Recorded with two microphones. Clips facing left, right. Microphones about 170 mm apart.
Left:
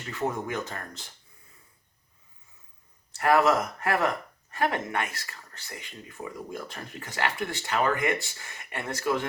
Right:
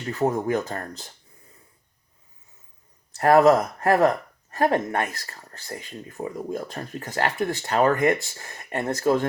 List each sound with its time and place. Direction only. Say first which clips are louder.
0.1 s speech: right 7 dB; 40° right (ahead or behind)
3.2 s speech: right 6 dB; 40° right (ahead or behind)